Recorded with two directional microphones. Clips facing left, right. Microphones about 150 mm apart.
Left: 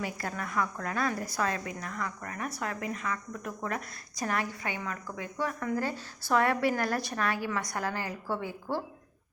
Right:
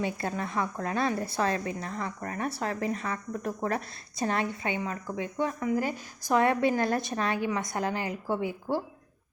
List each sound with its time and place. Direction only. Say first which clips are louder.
0.0 s a woman's voice: right 4 dB; 25° right (ahead or behind)